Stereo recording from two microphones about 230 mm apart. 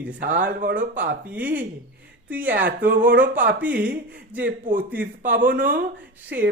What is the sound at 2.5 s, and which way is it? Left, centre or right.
Speech, right.